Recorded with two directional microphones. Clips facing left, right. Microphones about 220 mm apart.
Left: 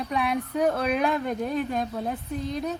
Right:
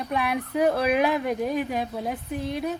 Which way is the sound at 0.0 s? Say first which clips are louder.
Even; centre (ahead or behind).